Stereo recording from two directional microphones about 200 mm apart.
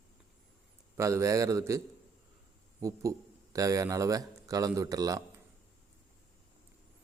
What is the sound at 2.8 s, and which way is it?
Speech, 15° right (ahead or behind).